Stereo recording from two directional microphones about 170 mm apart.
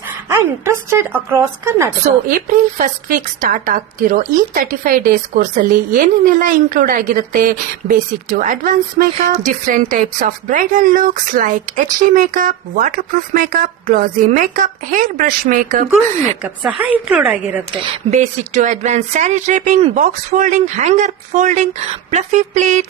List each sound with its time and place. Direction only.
0.3 s a woman's voice: 15° right (ahead or behind)
2.2 s a woman's voice: 50° right (ahead or behind)
16.4 s a woman's voice: 10° right (ahead or behind)
17.9 s a woman's voice: 45° right (ahead or behind)